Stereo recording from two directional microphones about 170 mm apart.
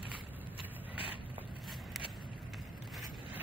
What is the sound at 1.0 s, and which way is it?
Vehicle, 30° right (ahead or behind).